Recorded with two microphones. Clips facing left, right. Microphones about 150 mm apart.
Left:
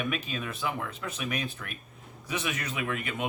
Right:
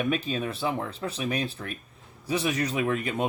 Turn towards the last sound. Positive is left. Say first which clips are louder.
# right 6 dB
turn(degrees=-35)  # may be behind; listen again after turning